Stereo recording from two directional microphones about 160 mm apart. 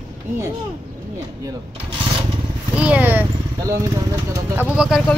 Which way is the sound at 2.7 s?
10° right (ahead or behind).